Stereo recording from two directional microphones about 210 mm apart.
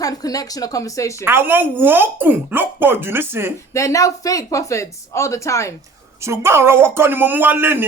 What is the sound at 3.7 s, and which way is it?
Speech, 15° left (ahead or behind).